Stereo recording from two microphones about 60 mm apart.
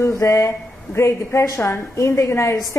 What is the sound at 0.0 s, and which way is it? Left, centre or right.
A woman's voice, left.